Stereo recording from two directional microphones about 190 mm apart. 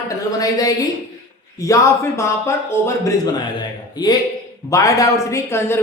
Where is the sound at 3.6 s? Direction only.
20° left (ahead or behind).